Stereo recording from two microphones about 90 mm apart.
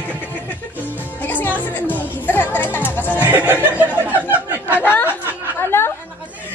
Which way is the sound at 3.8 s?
15° right (ahead or behind).